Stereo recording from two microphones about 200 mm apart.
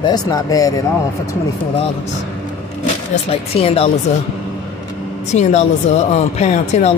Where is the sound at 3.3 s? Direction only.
30° left (ahead or behind).